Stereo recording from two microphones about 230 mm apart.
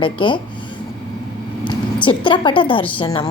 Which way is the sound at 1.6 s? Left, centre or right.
Left.